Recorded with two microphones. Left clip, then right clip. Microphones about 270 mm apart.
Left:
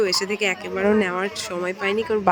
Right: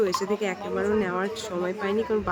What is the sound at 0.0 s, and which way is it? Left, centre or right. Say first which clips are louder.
Speech: left 4 dB; left.